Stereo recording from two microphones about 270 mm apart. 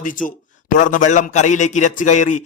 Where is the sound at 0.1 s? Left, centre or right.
Left.